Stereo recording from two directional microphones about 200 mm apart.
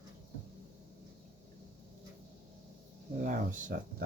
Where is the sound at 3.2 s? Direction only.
40° right (ahead or behind).